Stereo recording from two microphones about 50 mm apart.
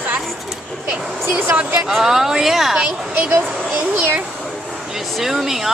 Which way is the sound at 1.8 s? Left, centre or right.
Centre.